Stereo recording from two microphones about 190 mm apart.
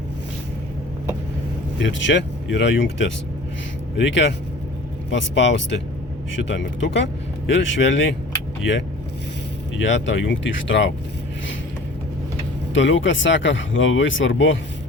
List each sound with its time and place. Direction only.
1.8 s speech: 75° left (ahead or behind)
9.8 s speech: 75° left (ahead or behind)
12.7 s speech: 75° left (ahead or behind)